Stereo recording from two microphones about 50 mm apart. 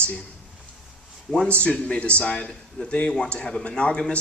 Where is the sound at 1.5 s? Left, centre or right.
Left.